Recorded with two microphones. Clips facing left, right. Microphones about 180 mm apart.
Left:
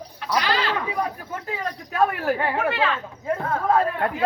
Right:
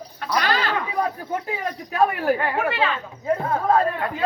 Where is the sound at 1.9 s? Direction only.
Centre (ahead or behind).